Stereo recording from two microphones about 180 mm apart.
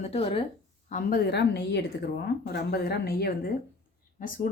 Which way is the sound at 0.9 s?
45° left (ahead or behind).